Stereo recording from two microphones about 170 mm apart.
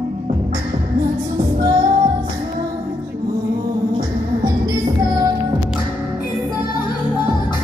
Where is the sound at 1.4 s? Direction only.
20° right (ahead or behind).